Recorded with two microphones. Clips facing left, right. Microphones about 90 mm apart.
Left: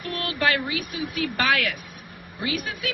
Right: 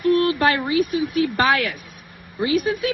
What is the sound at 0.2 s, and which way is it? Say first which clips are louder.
Speech: right 6 dB; 35° right (ahead or behind).